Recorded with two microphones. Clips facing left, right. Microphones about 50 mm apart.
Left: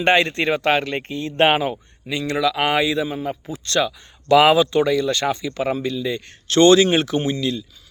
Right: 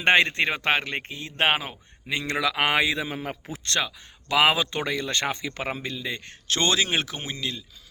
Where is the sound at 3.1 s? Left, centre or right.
Right.